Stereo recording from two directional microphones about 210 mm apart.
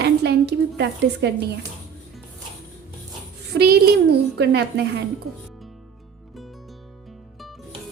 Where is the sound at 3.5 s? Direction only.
50° right (ahead or behind).